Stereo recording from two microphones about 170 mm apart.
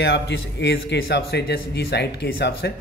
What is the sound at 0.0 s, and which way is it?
Speech, 85° left.